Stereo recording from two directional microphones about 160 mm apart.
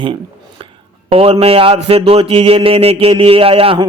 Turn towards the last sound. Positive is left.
turn(degrees=-35)  # may be behind; listen again after turning